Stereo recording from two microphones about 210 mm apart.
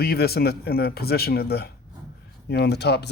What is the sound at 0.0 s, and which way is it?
Speech, 50° left (ahead or behind).